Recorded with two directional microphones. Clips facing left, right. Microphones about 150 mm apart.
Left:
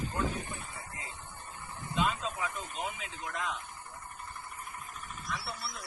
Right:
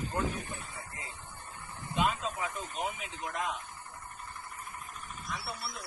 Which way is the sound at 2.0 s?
15° right (ahead or behind).